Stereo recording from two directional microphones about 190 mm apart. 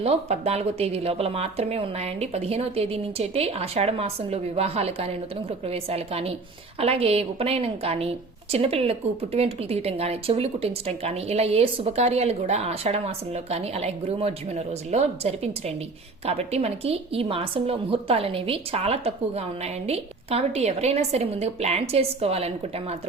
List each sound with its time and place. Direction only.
0.0 s a woman's voice: 30° right (ahead or behind)